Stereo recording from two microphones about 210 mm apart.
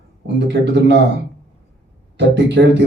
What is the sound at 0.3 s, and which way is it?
Speech, 55° right (ahead or behind).